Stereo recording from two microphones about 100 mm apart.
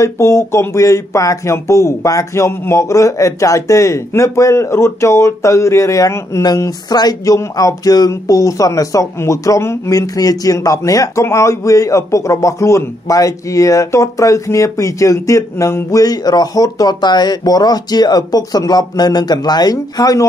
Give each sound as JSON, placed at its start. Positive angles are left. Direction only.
{"t": 0.0, "sound": "speech", "side_deg": 30}
{"t": 6.4, "sound": "speech", "side_deg": 40}